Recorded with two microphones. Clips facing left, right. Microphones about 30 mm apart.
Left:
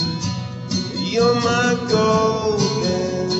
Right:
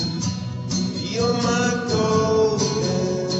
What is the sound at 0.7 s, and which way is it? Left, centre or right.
Music, left.